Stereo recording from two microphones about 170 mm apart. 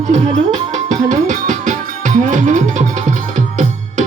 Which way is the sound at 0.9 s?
45° right (ahead or behind).